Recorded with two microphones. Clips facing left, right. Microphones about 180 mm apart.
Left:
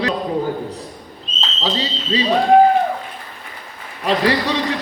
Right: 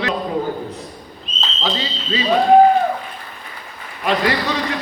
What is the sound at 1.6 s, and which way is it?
Speech, 30° left (ahead or behind).